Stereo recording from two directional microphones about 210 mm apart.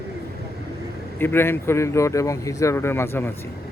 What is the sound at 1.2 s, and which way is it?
Speech, 10° left (ahead or behind).